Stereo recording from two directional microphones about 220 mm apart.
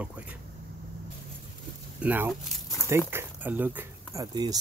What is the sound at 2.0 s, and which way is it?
Speech, 5° right (ahead or behind).